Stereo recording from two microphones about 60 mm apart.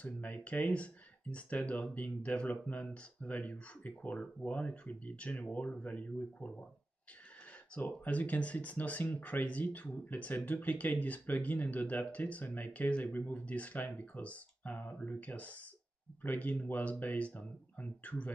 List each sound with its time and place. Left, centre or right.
0.0 s speech: left
7.7 s speech: centre
8.0 s speech: left